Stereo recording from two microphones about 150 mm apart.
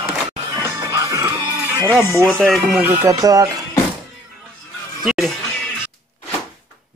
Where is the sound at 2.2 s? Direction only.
Centre (ahead or behind).